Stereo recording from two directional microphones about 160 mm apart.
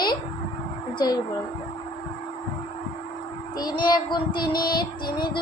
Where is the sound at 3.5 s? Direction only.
25° left (ahead or behind).